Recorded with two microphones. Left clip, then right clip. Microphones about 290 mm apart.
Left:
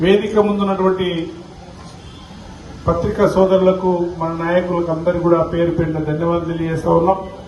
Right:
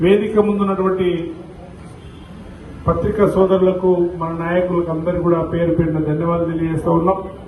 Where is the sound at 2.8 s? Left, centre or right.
Left.